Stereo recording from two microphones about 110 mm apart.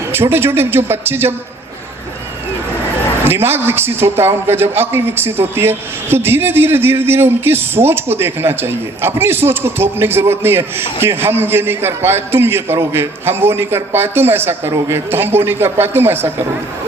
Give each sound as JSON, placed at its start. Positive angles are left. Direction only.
{"t": 0.1, "sound": "a man's voice", "side_deg": -20}
{"t": 3.2, "sound": "a man's voice", "side_deg": -20}